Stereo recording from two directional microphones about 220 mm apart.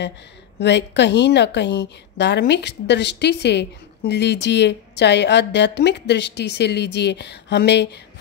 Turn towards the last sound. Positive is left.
turn(degrees=50)  # may be behind; listen again after turning